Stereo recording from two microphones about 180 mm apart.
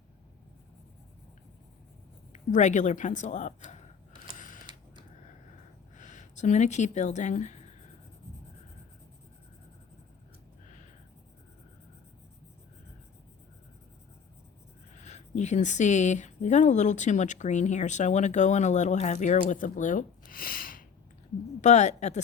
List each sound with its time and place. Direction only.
2.3 s a woman's voice: 45° left (ahead or behind)
4.2 s a sound: 45° left (ahead or behind)
6.0 s speech: 45° left (ahead or behind)
14.9 s speech: 40° left (ahead or behind)
21.6 s speech: 40° left (ahead or behind)